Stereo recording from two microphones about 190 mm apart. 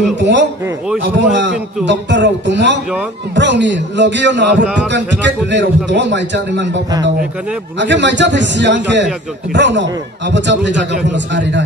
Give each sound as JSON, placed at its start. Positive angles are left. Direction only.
{"t": 0.1, "sound": "a man's voice", "side_deg": -65}
{"t": 7.8, "sound": "a man's voice", "side_deg": -70}